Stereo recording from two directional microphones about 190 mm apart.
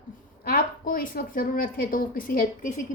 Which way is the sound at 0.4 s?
50° left (ahead or behind).